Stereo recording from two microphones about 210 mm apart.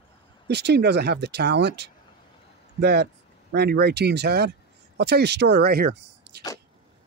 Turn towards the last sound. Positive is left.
turn(degrees=-50)  # may be behind; listen again after turning